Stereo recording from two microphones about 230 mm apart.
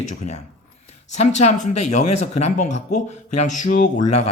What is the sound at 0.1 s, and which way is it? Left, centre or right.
Speech, left.